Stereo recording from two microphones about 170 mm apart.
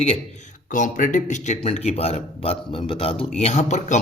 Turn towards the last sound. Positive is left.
turn(degrees=45)  # may be behind; listen again after turning